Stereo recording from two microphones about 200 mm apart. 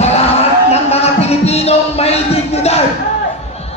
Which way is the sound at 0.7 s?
30° left (ahead or behind).